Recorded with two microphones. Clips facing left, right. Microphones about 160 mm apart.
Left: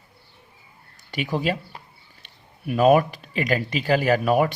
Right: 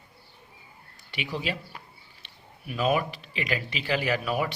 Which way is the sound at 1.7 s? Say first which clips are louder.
Left 2 dB; 30° left (ahead or behind).